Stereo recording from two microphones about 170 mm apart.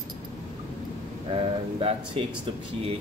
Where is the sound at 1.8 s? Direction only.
35° right (ahead or behind).